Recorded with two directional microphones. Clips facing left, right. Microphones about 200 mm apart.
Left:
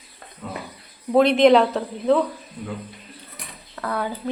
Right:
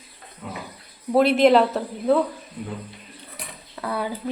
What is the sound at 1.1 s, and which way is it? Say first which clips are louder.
Speech: left 1 dB; 5° right (ahead or behind).